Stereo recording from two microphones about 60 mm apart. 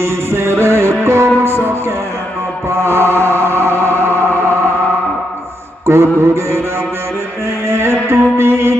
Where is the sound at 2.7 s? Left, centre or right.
Right.